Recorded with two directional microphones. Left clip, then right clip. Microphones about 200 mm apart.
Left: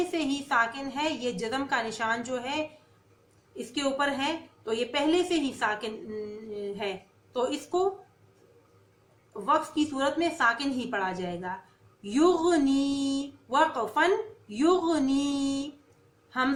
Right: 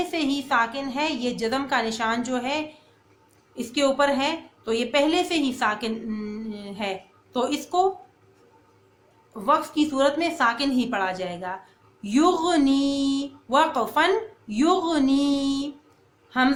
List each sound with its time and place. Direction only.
0.1 s a woman's voice: 50° right (ahead or behind)
3.8 s a woman's voice: 50° right (ahead or behind)
9.5 s a woman's voice: 50° right (ahead or behind)
16.3 s a sound: 55° right (ahead or behind)